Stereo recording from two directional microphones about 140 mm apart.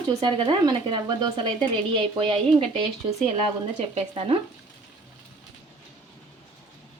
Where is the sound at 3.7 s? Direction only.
50° right (ahead or behind).